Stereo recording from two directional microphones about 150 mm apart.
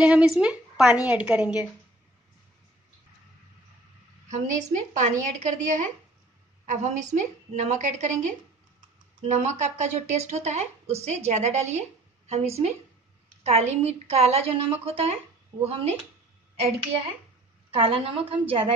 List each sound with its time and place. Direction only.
0.0 s a woman's voice: 5° right (ahead or behind)
4.3 s a woman's voice: 50° right (ahead or behind)